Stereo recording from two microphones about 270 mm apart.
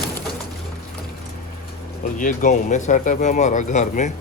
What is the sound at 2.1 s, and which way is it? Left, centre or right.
Speech, left.